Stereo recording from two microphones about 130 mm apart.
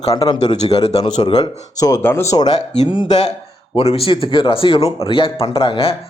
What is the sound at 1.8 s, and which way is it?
Speech, 25° left (ahead or behind).